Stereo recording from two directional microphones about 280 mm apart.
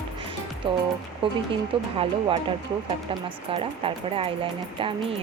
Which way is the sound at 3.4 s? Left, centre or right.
Centre.